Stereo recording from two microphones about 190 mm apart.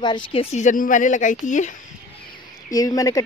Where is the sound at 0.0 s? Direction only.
25° left (ahead or behind); by 1.8 s 40° left (ahead or behind).